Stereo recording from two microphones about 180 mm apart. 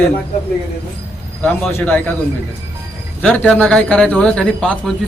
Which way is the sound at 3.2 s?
5° left (ahead or behind).